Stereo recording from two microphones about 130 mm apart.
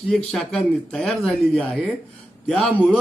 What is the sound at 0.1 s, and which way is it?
A man's voice, 5° left (ahead or behind).